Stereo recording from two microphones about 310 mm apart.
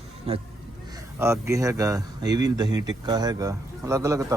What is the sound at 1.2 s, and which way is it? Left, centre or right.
A man's voice, centre.